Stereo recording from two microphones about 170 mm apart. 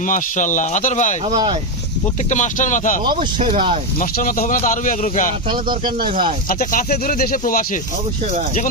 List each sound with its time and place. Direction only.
0.0 s speech: 50° left (ahead or behind)
2.3 s speech: 45° left (ahead or behind)
3.4 s speech: 35° right (ahead or behind)
4.0 s speech: 55° left (ahead or behind)
5.5 s speech: 25° right (ahead or behind)
6.0 s speech: 55° right (ahead or behind)
6.5 s speech: 55° left (ahead or behind)